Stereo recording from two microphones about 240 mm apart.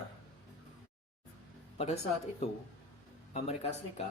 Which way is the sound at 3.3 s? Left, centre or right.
Left.